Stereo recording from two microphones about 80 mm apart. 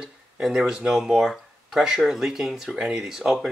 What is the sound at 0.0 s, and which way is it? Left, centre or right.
Speech, centre.